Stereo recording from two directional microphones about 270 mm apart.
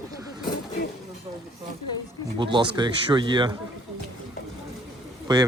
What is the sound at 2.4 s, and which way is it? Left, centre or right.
Speech, centre.